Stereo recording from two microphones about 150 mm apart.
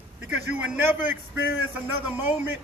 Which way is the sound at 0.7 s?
15° right (ahead or behind).